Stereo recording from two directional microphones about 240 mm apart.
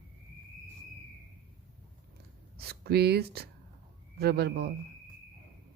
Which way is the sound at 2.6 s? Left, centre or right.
Right.